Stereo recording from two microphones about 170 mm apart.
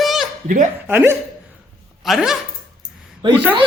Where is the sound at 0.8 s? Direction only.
15° right (ahead or behind).